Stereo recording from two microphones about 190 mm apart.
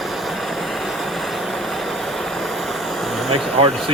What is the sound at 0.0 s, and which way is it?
Vehicle, centre (ahead or behind).